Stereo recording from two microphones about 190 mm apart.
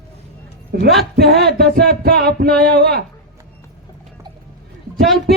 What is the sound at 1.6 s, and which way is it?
Music, 55° right (ahead or behind).